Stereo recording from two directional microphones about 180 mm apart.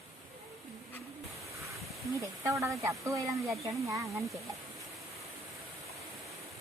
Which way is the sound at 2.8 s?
15° right (ahead or behind).